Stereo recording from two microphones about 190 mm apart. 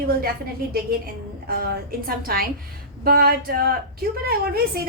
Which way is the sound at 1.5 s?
50° right (ahead or behind).